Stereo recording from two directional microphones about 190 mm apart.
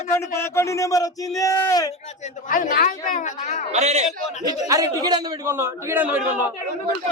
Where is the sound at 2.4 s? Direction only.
45° left (ahead or behind).